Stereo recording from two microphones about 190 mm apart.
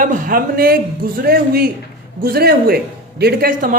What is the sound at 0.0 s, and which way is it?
A man's voice, 45° right (ahead or behind).